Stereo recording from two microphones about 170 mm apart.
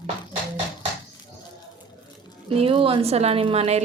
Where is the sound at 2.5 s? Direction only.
35° right (ahead or behind).